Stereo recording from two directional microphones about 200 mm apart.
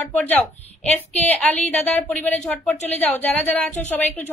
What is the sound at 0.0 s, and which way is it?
A woman's voice, 10° left (ahead or behind).